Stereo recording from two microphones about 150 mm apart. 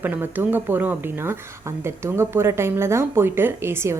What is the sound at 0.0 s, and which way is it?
Speech, 10° right (ahead or behind).